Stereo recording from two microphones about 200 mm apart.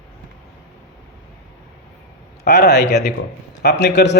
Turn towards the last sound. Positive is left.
turn(degrees=60)  # may be behind; listen again after turning